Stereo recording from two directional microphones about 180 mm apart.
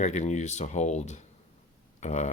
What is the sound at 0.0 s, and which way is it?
Speech, 40° left (ahead or behind).